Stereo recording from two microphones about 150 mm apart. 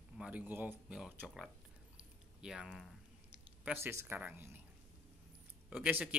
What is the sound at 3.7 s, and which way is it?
Speech, 15° right (ahead or behind).